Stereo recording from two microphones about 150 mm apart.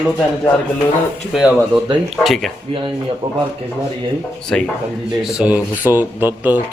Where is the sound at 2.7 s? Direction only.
35° right (ahead or behind).